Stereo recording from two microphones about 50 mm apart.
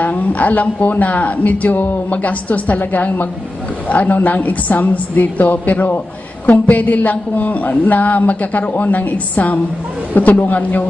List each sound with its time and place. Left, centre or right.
0.0 s speech: left